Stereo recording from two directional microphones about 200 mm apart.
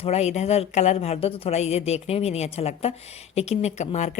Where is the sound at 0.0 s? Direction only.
35° left (ahead or behind).